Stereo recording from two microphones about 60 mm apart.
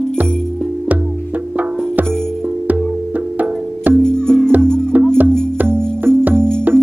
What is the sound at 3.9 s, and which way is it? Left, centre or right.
Music, centre.